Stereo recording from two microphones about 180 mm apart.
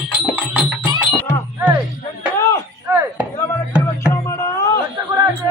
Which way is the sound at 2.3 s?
15° left (ahead or behind).